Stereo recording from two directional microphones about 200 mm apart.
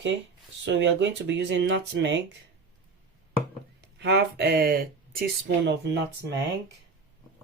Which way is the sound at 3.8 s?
55° right (ahead or behind).